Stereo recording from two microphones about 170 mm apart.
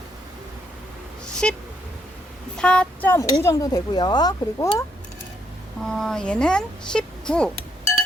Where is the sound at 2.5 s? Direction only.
5° left (ahead or behind); by 4.6 s 25° left (ahead or behind).